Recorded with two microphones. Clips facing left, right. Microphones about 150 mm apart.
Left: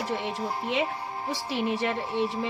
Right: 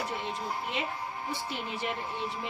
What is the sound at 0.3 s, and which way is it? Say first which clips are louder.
A woman's voice: left 6 dB; 90° left.